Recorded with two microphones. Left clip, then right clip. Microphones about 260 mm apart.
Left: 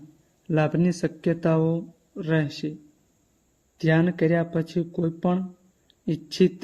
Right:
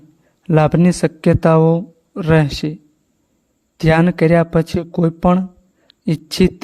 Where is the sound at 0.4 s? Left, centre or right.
Right.